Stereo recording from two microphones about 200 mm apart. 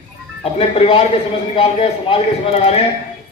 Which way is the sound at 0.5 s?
30° left (ahead or behind).